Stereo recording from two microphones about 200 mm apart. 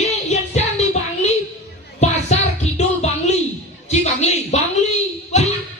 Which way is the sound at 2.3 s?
35° left (ahead or behind).